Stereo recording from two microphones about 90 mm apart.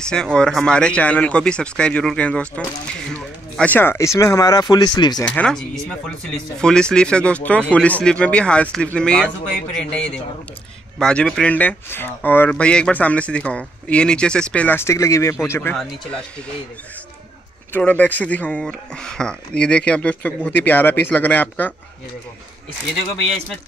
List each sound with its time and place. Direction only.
0.0 s speech: 10° left (ahead or behind)
3.7 s speech: 25° left (ahead or behind); by 5.2 s 55° left (ahead or behind)
5.2 s speech: 15° left (ahead or behind)
14.8 s speech: 30° left (ahead or behind)
15.7 s speech: 10° left (ahead or behind)
17.7 s speech: 20° left (ahead or behind)